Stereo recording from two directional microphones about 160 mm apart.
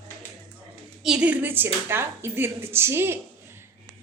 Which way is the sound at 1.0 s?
5° right (ahead or behind).